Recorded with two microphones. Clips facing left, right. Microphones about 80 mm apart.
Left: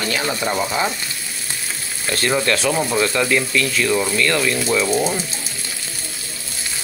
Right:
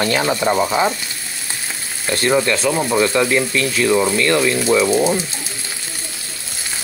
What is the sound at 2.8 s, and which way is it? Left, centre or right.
Speech, centre.